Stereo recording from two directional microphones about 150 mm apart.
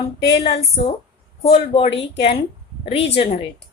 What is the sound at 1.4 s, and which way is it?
Speech, 40° left (ahead or behind).